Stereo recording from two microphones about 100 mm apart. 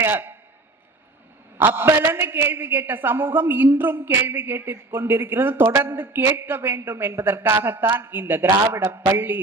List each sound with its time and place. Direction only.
0.0 s a man's voice: 20° right (ahead or behind)
1.5 s a woman's voice: 25° right (ahead or behind)